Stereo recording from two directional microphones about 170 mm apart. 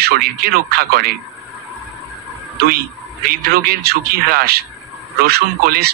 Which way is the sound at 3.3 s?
60° right (ahead or behind).